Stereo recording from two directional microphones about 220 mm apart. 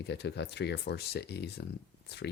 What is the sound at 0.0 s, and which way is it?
Speech, 50° left (ahead or behind).